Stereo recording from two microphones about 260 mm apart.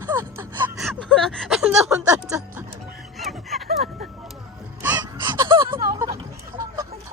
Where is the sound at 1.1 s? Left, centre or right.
Centre.